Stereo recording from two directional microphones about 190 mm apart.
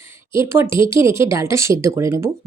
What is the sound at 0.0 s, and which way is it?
Speech, 15° right (ahead or behind).